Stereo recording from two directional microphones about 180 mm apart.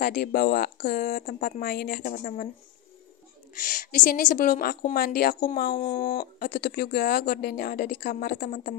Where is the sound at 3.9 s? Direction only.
50° left (ahead or behind).